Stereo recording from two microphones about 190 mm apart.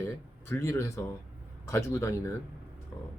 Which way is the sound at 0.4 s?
15° left (ahead or behind).